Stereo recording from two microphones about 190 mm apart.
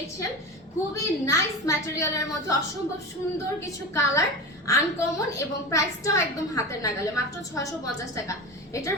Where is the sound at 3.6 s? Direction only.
15° left (ahead or behind).